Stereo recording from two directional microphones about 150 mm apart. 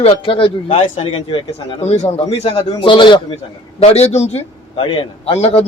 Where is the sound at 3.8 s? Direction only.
45° left (ahead or behind).